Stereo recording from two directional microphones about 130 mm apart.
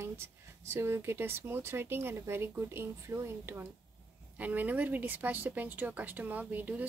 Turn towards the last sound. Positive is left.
turn(degrees=-15)  # may be behind; listen again after turning